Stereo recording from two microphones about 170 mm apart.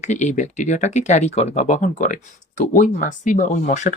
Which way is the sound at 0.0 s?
45° left (ahead or behind).